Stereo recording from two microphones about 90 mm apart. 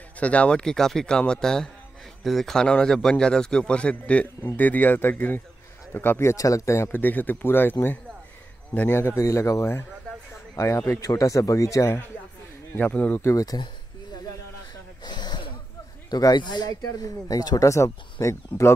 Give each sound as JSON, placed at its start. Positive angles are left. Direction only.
{"t": 0.2, "sound": "a man's voice", "side_deg": 15}
{"t": 8.7, "sound": "speech", "side_deg": 20}
{"t": 12.7, "sound": "a man's voice", "side_deg": 15}
{"t": 13.2, "sound": "speech", "side_deg": 30}
{"t": 15.0, "sound": "snort", "side_deg": 55}
{"t": 16.1, "sound": "speech", "side_deg": 45}